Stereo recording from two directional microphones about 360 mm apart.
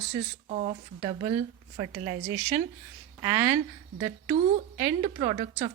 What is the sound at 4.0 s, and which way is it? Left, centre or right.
A woman's voice, centre.